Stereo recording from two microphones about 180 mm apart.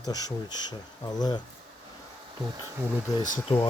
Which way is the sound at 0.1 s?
20° left (ahead or behind).